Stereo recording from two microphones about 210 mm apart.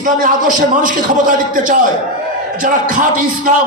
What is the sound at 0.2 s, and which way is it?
Speech, 40° right (ahead or behind).